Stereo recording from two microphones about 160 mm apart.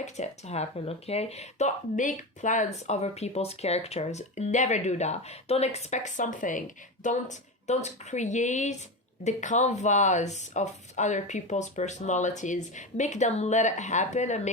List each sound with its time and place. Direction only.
0.0 s speech: 45° left (ahead or behind)